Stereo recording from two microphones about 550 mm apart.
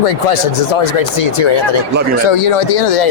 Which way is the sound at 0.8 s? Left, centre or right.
Left.